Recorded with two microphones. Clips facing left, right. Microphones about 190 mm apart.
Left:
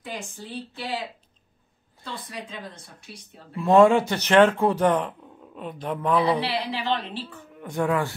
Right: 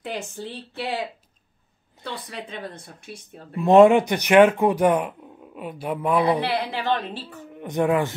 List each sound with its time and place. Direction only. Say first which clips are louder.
0.0 s speech: right 5 dB; 65° right (ahead or behind)
2.2 s speech: right 3 dB; 60° right (ahead or behind)
3.5 s speech: right 3 dB; 20° right (ahead or behind)
6.4 s a woman's voice: right 3 dB; 50° right (ahead or behind)
7.6 s speech: right 3 dB; 20° right (ahead or behind)